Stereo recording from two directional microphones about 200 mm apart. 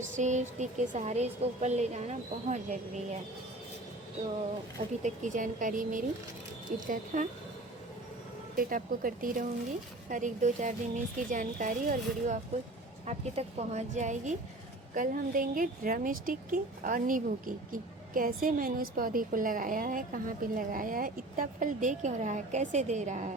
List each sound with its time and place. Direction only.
0.2 s a woman's voice: 35° right (ahead or behind)
5.0 s a woman's voice: 40° right (ahead or behind)
8.5 s a woman's voice: 45° right (ahead or behind)